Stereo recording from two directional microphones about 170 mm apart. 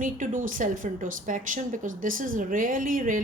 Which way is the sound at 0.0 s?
50° right (ahead or behind).